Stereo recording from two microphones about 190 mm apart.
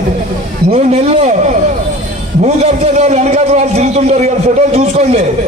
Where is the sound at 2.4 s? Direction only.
35° right (ahead or behind).